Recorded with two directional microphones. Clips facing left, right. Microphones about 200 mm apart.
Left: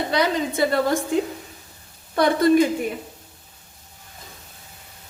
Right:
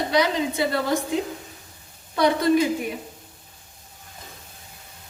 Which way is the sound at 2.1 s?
55° left (ahead or behind).